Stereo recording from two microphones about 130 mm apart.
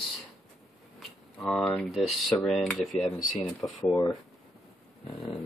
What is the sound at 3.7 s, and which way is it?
Speech, 30° left (ahead or behind).